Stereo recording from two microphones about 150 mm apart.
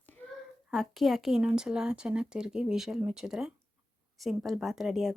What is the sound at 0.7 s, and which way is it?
A woman's voice, centre (ahead or behind).